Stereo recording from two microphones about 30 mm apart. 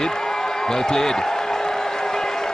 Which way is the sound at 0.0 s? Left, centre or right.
Centre.